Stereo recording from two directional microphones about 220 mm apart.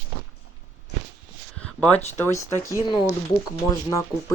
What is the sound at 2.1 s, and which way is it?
Speech, 10° left (ahead or behind).